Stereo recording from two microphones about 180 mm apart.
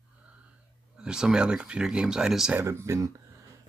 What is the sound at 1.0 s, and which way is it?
Speech, 5° right (ahead or behind).